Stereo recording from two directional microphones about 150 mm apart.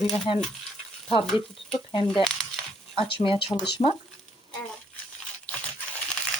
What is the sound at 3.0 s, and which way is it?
Stir, 35° left (ahead or behind).